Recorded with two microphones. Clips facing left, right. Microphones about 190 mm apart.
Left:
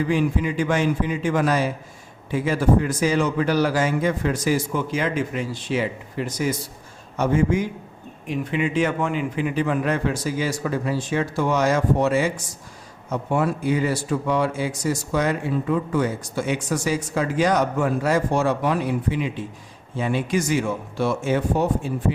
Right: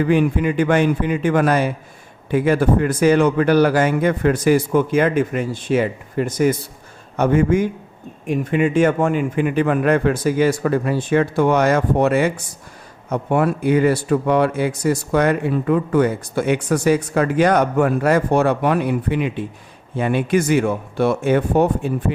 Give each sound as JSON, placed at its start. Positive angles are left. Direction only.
{"t": 0.0, "sound": "speech", "side_deg": -60}